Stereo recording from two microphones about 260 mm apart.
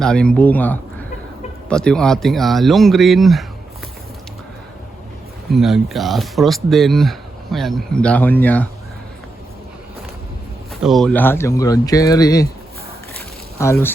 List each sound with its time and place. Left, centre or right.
0.0 s speech: centre
5.5 s speech: centre
10.8 s speech: centre
13.6 s speech: centre